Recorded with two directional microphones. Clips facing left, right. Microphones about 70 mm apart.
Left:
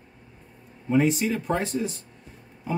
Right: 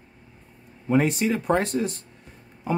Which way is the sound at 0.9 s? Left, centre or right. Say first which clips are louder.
Right 1 dB; right.